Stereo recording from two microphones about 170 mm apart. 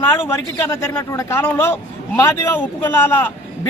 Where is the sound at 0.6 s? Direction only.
15° left (ahead or behind).